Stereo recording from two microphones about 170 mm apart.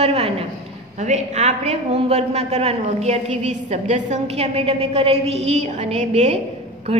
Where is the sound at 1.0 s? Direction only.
40° right (ahead or behind).